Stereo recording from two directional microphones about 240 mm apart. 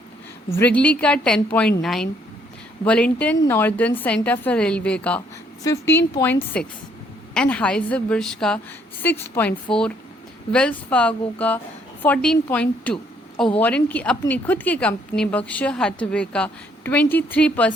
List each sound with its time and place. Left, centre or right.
0.5 s a woman's voice: centre
7.3 s a woman's voice: centre
9.7 s speech: left
10.5 s a woman's voice: centre